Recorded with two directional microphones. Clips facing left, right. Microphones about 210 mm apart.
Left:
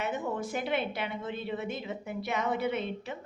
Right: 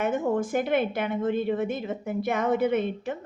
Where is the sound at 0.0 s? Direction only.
45° right (ahead or behind).